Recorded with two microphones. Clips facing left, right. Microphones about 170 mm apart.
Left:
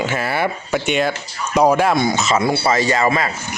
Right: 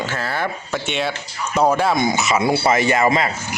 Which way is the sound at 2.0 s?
20° right (ahead or behind).